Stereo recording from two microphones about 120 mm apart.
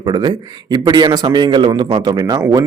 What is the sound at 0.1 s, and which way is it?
A man's voice, 35° right (ahead or behind).